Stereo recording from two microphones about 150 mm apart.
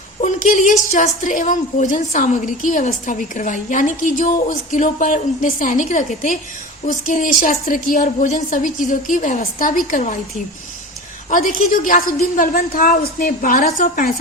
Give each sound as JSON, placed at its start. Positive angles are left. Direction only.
{"t": 0.2, "sound": "a sound", "side_deg": 60}
{"t": 0.9, "sound": "a woman's voice", "side_deg": 55}
{"t": 11.3, "sound": "a woman's voice", "side_deg": 60}